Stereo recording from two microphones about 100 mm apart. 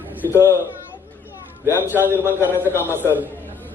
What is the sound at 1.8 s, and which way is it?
Speech, 20° right (ahead or behind).